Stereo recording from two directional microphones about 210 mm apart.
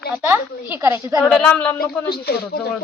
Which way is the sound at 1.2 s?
5° left (ahead or behind).